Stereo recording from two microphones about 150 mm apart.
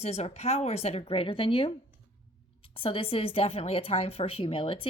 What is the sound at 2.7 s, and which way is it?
Speech, 35° left (ahead or behind).